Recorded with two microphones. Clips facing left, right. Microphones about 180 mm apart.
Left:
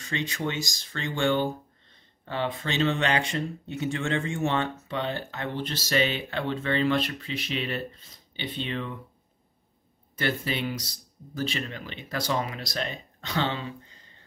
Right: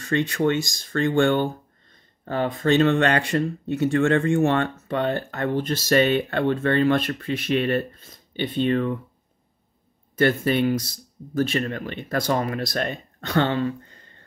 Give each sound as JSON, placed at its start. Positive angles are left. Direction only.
{"t": 0.0, "sound": "speech", "side_deg": -55}
{"t": 10.1, "sound": "speech", "side_deg": -50}